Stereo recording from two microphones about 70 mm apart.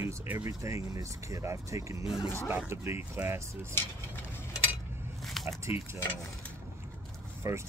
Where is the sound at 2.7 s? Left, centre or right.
Right.